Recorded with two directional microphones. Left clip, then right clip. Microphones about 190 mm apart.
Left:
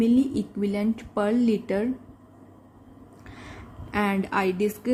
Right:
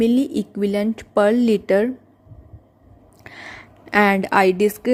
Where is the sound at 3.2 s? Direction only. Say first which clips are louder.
Right 8 dB; 50° right (ahead or behind).